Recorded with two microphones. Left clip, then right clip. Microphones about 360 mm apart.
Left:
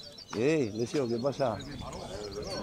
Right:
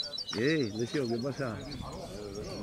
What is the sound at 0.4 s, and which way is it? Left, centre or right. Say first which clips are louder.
Speech: left 2 dB; centre.